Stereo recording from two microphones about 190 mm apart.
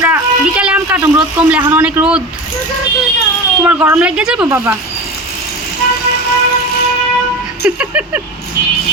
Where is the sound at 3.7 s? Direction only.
5° right (ahead or behind).